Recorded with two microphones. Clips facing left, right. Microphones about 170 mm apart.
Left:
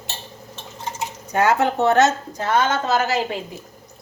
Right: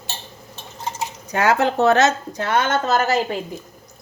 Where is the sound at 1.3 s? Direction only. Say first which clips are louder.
Even; 80° right; by 3.2 s 45° right (ahead or behind).